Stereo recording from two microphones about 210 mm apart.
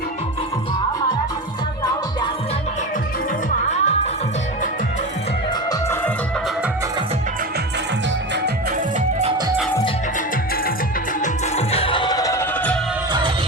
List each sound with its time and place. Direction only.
3.7 s music: 35° left (ahead or behind)
11.2 s music: 30° left (ahead or behind); by 12.8 s 5° left (ahead or behind)